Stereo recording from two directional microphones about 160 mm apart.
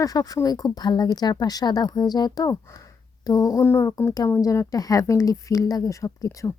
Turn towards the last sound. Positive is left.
turn(degrees=20)  # may be behind; listen again after turning